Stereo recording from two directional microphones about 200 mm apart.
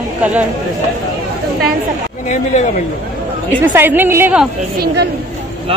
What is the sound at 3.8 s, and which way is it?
Speech, 10° right (ahead or behind).